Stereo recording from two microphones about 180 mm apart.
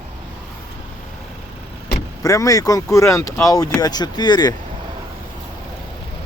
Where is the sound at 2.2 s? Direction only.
20° left (ahead or behind).